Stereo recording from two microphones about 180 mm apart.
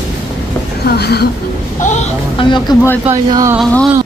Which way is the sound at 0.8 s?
65° left (ahead or behind).